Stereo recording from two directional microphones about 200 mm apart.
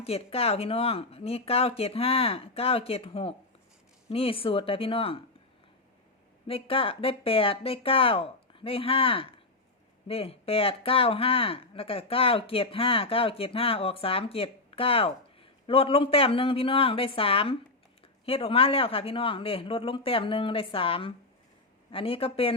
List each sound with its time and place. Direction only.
0.0 s speech: 30° left (ahead or behind)
6.5 s speech: 25° left (ahead or behind)